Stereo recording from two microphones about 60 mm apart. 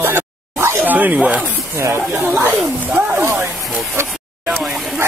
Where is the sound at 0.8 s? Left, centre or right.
Right.